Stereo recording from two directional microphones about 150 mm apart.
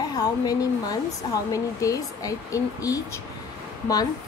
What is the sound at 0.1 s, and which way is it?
A woman's voice, 25° left (ahead or behind).